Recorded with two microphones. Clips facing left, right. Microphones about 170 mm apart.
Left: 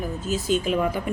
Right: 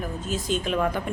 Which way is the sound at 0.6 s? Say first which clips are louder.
Left 1 dB; 5° left (ahead or behind).